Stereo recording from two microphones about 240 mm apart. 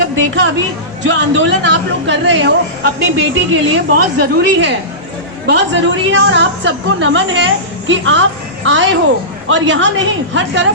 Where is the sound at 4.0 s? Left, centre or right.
Right.